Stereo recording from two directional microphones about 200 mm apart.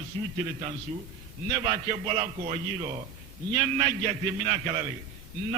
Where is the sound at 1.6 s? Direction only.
25° right (ahead or behind).